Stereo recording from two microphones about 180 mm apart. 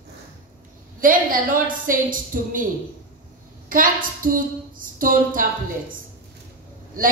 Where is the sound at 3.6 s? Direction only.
50° right (ahead or behind).